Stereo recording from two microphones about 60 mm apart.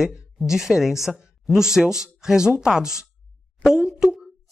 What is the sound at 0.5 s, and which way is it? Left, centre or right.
Speech, centre.